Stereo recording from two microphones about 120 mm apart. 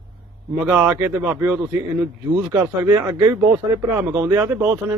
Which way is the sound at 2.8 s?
25° right (ahead or behind).